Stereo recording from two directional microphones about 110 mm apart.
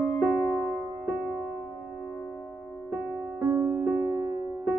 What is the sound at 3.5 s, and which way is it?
Music, 15° right (ahead or behind).